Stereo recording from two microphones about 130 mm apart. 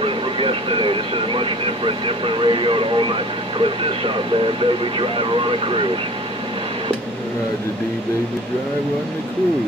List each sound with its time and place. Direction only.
0.0 s speech: 45° right (ahead or behind)